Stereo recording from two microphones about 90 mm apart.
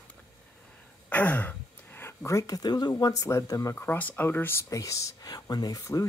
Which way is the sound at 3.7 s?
20° left (ahead or behind).